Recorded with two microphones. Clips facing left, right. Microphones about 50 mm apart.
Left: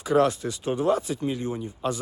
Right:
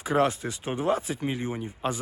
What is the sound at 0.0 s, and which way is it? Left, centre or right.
Speech, right.